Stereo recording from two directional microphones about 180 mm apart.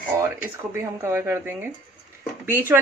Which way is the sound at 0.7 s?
15° right (ahead or behind).